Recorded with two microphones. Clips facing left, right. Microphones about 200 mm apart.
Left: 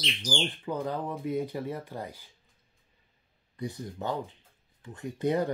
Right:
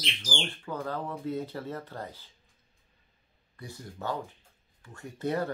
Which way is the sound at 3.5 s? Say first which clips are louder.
Left 7 dB; 20° left (ahead or behind).